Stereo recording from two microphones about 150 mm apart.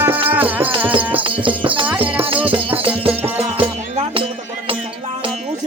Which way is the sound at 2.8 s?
40° right (ahead or behind).